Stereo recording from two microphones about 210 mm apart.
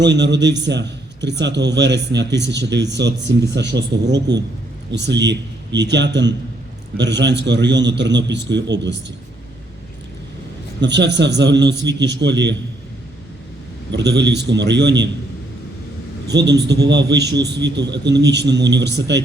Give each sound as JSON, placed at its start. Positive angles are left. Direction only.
{"t": 0.0, "sound": "a man's voice", "side_deg": -55}
{"t": 4.9, "sound": "a man's voice", "side_deg": -55}
{"t": 10.8, "sound": "a man's voice", "side_deg": -55}
{"t": 13.9, "sound": "a man's voice", "side_deg": -55}
{"t": 16.3, "sound": "a man's voice", "side_deg": -55}